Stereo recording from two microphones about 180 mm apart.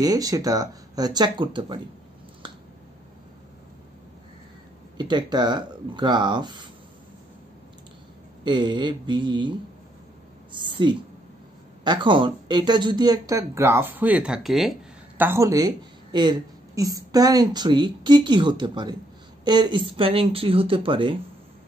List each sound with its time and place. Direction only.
0.0 s speech: 20° right (ahead or behind)
4.9 s speech: 25° right (ahead or behind)
8.5 s speech: 25° right (ahead or behind); by 15.2 s centre (ahead or behind)
15.2 s speech: 15° right (ahead or behind)